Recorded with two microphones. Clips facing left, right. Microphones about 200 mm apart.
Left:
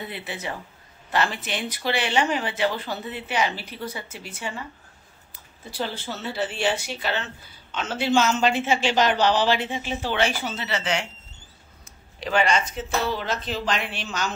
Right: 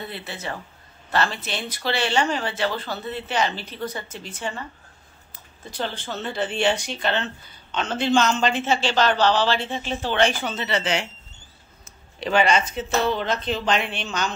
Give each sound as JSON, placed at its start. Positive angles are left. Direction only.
{"t": 0.0, "sound": "speech", "side_deg": 15}
{"t": 12.2, "sound": "a woman's voice", "side_deg": 0}